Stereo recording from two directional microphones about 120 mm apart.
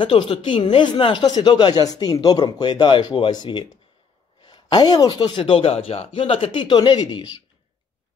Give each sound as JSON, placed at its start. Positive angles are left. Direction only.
{"t": 0.0, "sound": "speech", "side_deg": 45}
{"t": 5.4, "sound": "speech", "side_deg": 55}